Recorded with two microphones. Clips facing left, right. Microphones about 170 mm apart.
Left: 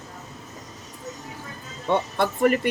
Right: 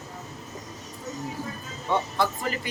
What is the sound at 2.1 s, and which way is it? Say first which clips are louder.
Speech: left 7 dB; 60° left (ahead or behind).